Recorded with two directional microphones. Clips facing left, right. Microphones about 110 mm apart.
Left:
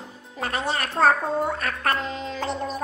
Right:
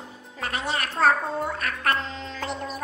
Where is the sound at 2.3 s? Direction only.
35° left (ahead or behind).